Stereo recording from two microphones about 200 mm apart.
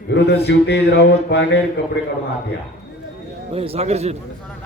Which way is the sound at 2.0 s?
60° left (ahead or behind).